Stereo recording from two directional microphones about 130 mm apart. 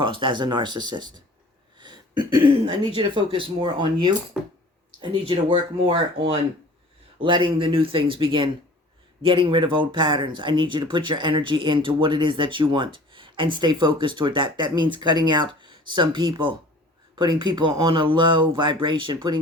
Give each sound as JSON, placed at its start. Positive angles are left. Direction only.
{"t": 0.0, "sound": "speech", "side_deg": -40}
{"t": 1.8, "sound": "a sound", "side_deg": -35}
{"t": 3.0, "sound": "speech", "side_deg": -35}
{"t": 4.4, "sound": "speech", "side_deg": 0}
{"t": 4.9, "sound": "speech", "side_deg": -45}